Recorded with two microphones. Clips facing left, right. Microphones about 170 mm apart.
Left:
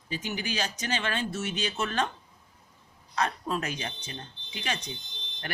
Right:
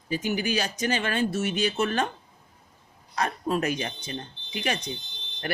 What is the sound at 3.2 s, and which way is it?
Speech, 50° right (ahead or behind).